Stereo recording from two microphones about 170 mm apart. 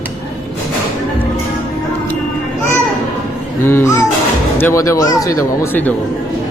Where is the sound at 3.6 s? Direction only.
15° left (ahead or behind).